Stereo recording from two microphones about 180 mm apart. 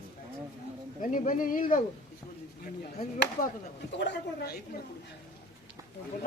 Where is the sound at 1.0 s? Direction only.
45° left (ahead or behind).